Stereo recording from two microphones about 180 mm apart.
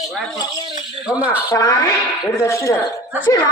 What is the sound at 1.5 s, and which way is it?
A man's voice, 20° left (ahead or behind).